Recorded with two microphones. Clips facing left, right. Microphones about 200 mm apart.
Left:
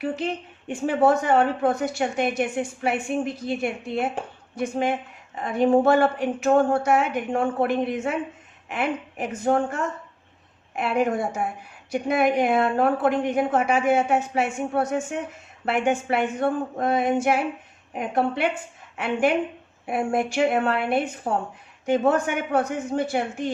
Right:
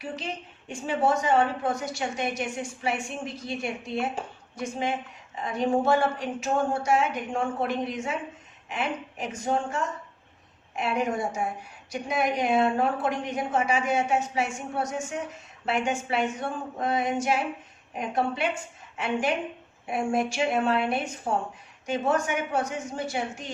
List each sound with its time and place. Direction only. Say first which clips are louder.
0.0 s a woman's voice: left 8 dB; 60° left (ahead or behind)